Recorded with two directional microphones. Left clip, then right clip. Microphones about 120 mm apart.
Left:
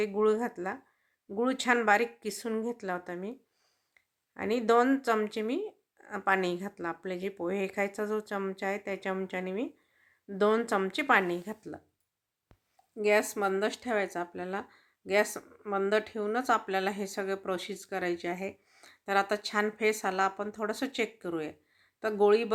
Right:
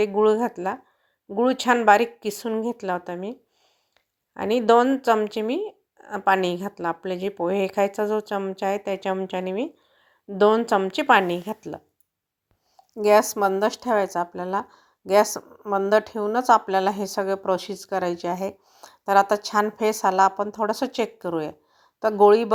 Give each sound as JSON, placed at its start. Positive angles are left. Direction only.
{"t": 0.0, "sound": "a woman's voice", "side_deg": -30}
{"t": 4.4, "sound": "a woman's voice", "side_deg": -35}
{"t": 13.0, "sound": "a woman's voice", "side_deg": -50}